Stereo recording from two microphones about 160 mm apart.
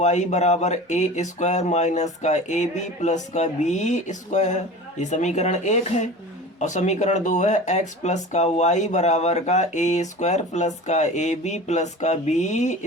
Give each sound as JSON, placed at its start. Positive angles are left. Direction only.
{"t": 0.0, "sound": "speech", "side_deg": 45}